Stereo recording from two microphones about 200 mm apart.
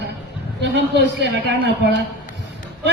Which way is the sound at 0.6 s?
60° right (ahead or behind).